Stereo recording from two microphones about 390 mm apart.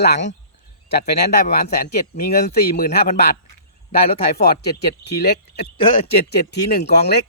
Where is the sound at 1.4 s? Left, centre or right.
Left.